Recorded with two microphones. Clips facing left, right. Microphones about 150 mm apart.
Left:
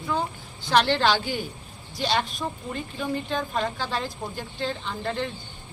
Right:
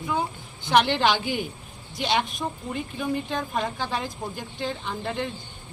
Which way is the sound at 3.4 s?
Centre (ahead or behind).